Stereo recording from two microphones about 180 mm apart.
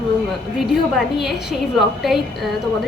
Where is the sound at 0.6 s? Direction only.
Centre (ahead or behind).